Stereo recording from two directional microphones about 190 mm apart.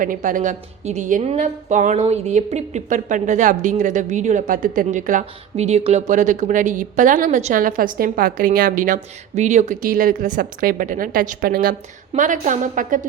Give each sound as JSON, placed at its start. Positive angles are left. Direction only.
{"t": 0.0, "sound": "a woman's voice", "side_deg": -45}